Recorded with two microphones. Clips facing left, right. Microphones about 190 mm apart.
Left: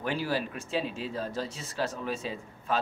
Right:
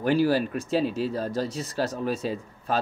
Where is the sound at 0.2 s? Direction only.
40° right (ahead or behind).